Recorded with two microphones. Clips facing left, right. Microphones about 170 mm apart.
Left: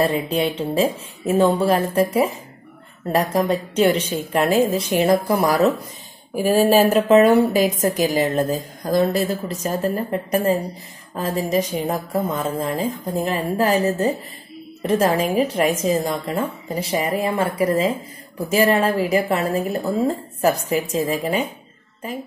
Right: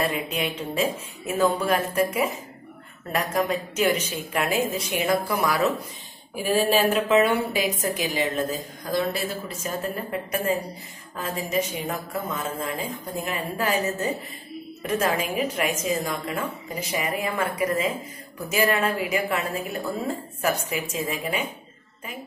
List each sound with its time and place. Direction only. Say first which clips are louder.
0.0 s a woman's voice: left 7 dB; 35° left (ahead or behind)